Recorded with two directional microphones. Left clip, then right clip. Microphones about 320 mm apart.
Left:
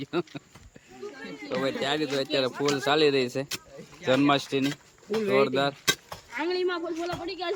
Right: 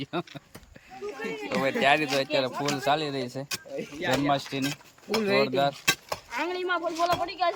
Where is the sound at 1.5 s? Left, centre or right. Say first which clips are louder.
Right 5 dB; centre.